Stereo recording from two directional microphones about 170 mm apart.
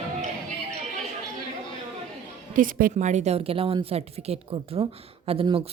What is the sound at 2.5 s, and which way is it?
A woman's voice, 55° right (ahead or behind).